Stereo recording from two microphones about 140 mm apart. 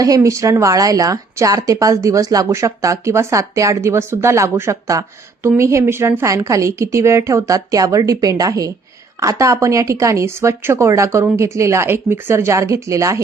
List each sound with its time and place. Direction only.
0.0 s speech: 25° right (ahead or behind)